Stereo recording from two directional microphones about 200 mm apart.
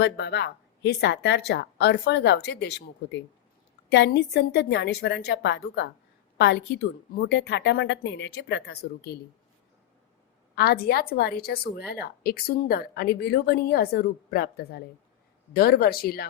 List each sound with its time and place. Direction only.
0.0 s a woman's voice: 55° left (ahead or behind)
10.5 s a woman's voice: 50° left (ahead or behind)